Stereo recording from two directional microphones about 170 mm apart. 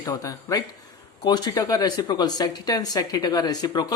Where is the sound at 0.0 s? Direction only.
20° left (ahead or behind).